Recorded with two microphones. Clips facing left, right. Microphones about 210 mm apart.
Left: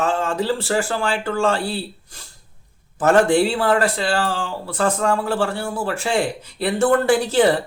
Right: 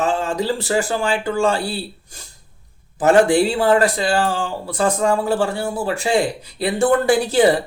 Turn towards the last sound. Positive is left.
turn(degrees=-10)  # may be behind; listen again after turning